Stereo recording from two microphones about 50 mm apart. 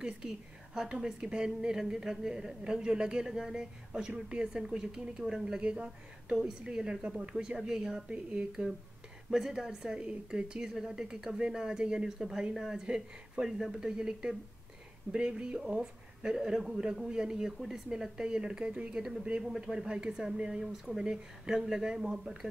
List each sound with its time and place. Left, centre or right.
0.7 s speech: centre
8.1 s speech: right
9.3 s speech: centre
18.9 s speech: centre